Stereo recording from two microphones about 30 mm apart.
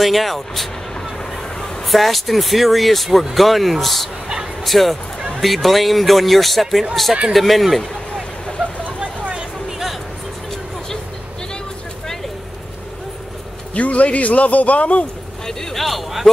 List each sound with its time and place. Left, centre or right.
0.0 s speech: centre
1.9 s speech: centre
9.7 s music: centre
13.7 s a man's voice: left
15.4 s boat: centre